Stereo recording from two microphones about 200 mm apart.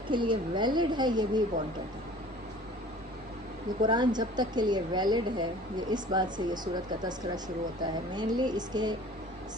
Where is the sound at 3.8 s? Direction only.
20° right (ahead or behind).